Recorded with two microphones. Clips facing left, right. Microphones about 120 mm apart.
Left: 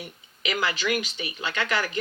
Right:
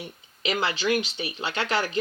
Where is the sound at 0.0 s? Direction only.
25° right (ahead or behind).